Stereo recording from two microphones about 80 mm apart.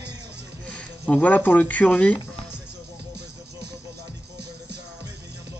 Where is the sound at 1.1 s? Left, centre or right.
Left.